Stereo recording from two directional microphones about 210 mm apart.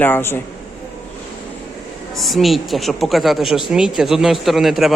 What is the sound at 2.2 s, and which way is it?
A woman's voice, centre (ahead or behind).